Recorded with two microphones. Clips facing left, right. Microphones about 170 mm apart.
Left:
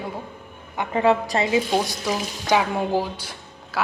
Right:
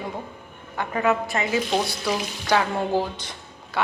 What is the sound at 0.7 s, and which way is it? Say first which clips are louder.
Speech: left 3 dB; 20° left (ahead or behind).